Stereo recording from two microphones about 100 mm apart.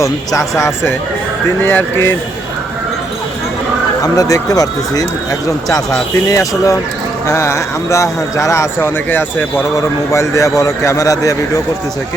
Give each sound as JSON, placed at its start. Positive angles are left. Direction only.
{"t": 0.0, "sound": "a man's voice", "side_deg": 35}
{"t": 1.6, "sound": "speech", "side_deg": 20}
{"t": 4.0, "sound": "a man's voice", "side_deg": 35}
{"t": 9.0, "sound": "speech", "side_deg": 20}
{"t": 9.7, "sound": "a man's voice", "side_deg": 30}